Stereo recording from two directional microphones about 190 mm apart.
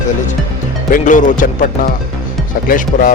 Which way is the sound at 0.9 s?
45° left (ahead or behind).